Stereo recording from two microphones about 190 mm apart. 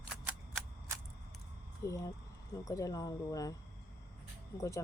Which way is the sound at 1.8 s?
15° left (ahead or behind).